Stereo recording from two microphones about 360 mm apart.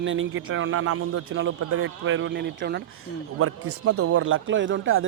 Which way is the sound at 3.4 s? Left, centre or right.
Right.